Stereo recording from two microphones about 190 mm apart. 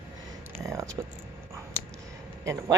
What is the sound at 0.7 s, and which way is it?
Speech, 15° right (ahead or behind).